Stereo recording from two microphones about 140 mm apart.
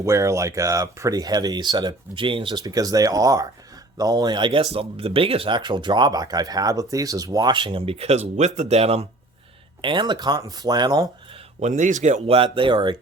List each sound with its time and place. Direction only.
0.0 s speech: 20° right (ahead or behind)
7.5 s speech: 40° right (ahead or behind)
9.8 s speech: 35° right (ahead or behind)
11.6 s speech: 60° right (ahead or behind); by 13.0 s 35° right (ahead or behind)